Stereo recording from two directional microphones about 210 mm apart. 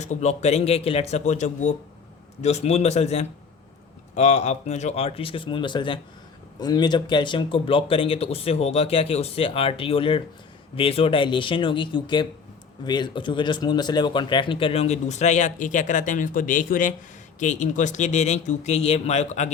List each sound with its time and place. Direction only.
0.0 s speech: 35° left (ahead or behind)